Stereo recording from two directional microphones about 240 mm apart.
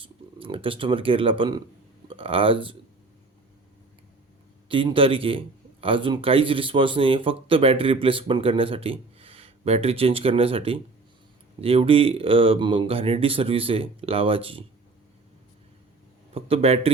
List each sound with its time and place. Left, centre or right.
0.0 s speech: right
4.7 s speech: right
16.3 s speech: right